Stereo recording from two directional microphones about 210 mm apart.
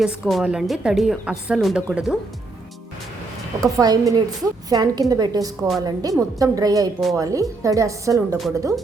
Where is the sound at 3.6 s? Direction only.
15° right (ahead or behind).